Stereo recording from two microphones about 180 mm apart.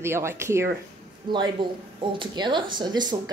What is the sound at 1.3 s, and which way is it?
Speech, 25° right (ahead or behind).